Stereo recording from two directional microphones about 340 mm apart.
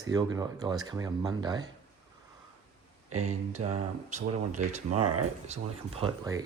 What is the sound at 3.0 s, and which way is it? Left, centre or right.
Speech, right.